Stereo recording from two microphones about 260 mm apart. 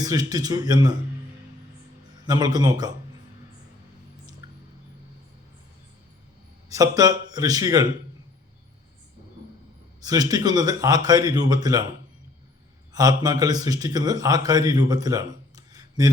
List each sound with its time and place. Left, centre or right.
0.0 s speech: centre
2.2 s speech: centre
4.4 s a sound: centre
6.7 s speech: centre
10.0 s speech: centre
12.9 s a man's voice: centre